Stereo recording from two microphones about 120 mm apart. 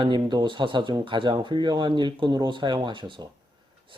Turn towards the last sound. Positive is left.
turn(degrees=-45)  # may be behind; listen again after turning